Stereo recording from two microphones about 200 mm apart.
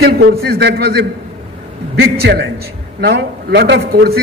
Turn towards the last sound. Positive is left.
turn(degrees=-50)  # may be behind; listen again after turning